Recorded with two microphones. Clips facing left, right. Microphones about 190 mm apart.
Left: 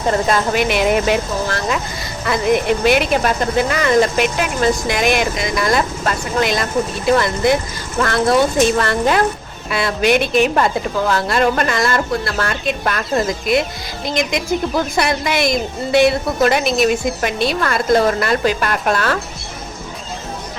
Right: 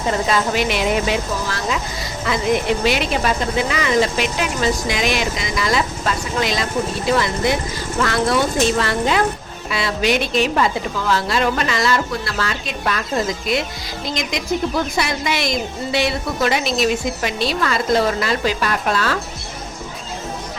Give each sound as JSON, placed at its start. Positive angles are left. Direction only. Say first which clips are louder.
{"t": 0.3, "sound": "speech", "louder": "left 2 dB", "side_deg": 50}